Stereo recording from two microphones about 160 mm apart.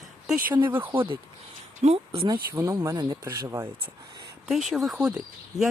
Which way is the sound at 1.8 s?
40° right (ahead or behind).